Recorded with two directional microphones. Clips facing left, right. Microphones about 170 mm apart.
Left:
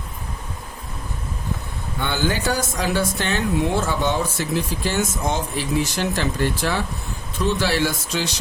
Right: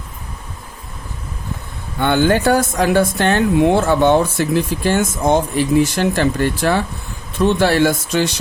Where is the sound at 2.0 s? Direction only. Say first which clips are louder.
Right 9 dB; 55° right (ahead or behind).